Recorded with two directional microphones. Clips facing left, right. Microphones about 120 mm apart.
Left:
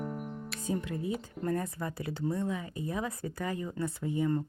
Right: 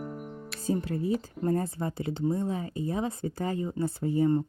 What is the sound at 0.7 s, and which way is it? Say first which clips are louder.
Speech: right 5 dB; 35° right (ahead or behind).